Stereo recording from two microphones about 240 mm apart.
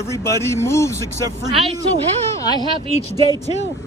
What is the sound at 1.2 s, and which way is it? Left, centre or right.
Speech, right.